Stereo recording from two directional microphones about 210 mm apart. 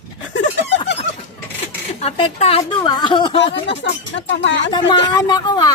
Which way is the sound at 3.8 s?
60° left (ahead or behind).